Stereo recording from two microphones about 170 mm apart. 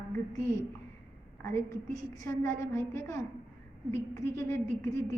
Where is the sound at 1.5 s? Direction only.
20° left (ahead or behind).